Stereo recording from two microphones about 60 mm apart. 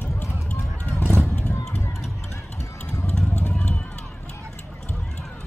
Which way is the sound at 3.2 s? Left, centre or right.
Left.